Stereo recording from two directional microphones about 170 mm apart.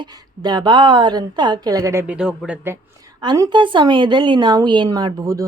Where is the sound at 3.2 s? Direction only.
25° right (ahead or behind).